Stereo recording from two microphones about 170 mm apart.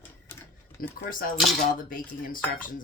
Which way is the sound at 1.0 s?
55° left (ahead or behind).